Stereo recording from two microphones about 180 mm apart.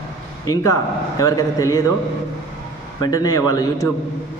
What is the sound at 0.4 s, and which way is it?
A man's voice, 20° left (ahead or behind).